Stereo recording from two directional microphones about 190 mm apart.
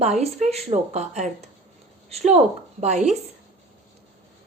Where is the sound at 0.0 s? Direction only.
35° right (ahead or behind).